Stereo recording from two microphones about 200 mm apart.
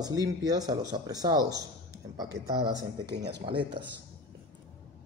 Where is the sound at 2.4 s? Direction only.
55° right (ahead or behind).